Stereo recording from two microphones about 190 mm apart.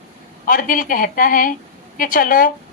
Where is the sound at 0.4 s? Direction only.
45° left (ahead or behind).